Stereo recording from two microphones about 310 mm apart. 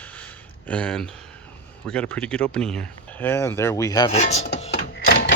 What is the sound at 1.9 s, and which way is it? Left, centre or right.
Speech, centre.